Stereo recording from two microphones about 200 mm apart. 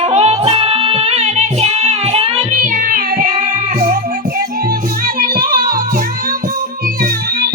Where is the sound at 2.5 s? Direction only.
40° right (ahead or behind).